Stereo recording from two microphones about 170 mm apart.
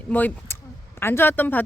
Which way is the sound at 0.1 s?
10° left (ahead or behind).